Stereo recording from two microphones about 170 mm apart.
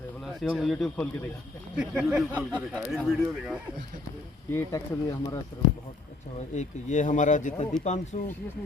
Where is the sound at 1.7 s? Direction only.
5° right (ahead or behind).